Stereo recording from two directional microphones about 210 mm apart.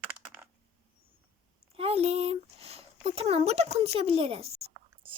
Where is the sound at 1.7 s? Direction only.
30° right (ahead or behind).